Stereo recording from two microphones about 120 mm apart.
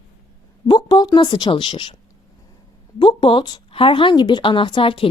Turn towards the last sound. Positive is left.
turn(degrees=45)  # may be behind; listen again after turning